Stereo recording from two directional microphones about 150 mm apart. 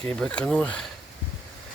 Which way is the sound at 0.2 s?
10° left (ahead or behind).